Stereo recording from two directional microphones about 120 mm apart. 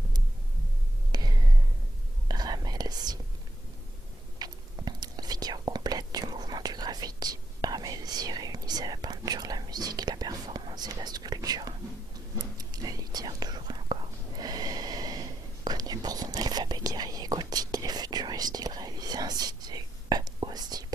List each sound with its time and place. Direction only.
1.1 s whispering: 35° right (ahead or behind)
4.4 s whispering: 35° right (ahead or behind)